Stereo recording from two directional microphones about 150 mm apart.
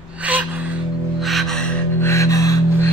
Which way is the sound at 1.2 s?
Centre (ahead or behind).